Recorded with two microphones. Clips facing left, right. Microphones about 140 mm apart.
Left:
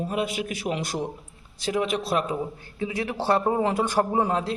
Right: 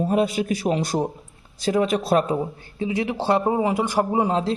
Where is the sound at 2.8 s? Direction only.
25° right (ahead or behind).